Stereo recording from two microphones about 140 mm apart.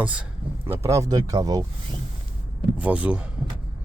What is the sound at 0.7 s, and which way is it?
Speech, 20° right (ahead or behind).